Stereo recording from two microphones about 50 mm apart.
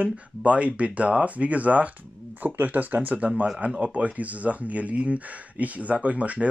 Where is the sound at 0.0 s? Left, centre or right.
Right.